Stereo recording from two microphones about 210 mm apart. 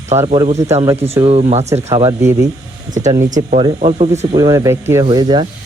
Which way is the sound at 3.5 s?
30° right (ahead or behind).